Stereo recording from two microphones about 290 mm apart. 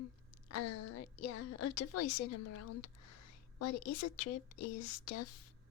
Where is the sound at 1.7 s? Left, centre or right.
Left.